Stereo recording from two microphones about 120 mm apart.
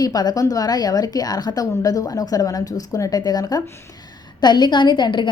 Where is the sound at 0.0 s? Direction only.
35° left (ahead or behind).